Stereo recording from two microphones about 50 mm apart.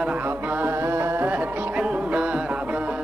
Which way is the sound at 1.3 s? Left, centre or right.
Right.